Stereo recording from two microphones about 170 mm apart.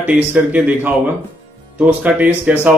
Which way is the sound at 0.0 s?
10° right (ahead or behind).